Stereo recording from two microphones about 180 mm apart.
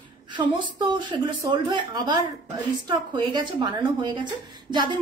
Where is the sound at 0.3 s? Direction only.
25° right (ahead or behind).